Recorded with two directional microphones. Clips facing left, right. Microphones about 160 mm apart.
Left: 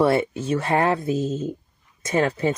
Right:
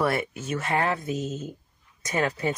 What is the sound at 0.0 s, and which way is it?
Speech, 25° left (ahead or behind).